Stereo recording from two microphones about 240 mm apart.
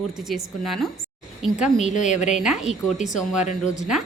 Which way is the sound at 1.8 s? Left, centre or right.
Left.